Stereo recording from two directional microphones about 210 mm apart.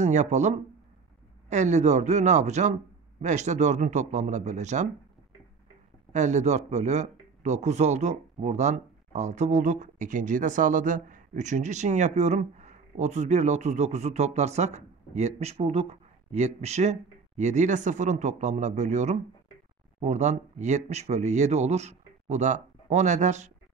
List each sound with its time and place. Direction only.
0.0 s a man's voice: 35° right (ahead or behind)
6.1 s a man's voice: 35° right (ahead or behind)